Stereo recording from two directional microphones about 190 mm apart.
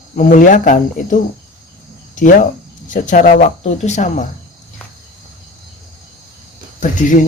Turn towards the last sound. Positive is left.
turn(degrees=45)  # may be behind; listen again after turning